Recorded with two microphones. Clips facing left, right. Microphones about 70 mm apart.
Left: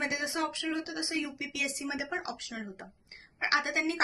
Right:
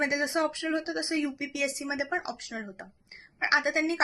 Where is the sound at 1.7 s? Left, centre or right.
Centre.